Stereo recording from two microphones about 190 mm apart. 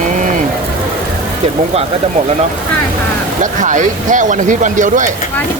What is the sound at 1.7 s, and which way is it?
Speech, 35° right (ahead or behind).